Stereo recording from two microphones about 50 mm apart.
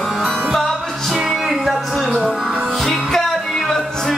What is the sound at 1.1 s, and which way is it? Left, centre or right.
Music, centre.